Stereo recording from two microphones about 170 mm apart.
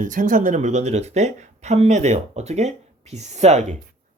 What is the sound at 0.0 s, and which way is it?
Speech, 50° right (ahead or behind).